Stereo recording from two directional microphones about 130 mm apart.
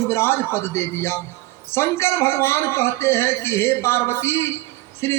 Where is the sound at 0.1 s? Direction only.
20° left (ahead or behind).